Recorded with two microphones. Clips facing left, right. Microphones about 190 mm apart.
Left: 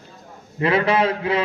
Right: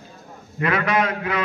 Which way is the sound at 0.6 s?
30° left (ahead or behind).